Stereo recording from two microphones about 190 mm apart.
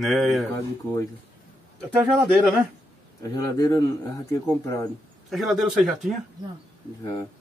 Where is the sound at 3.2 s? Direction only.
20° left (ahead or behind).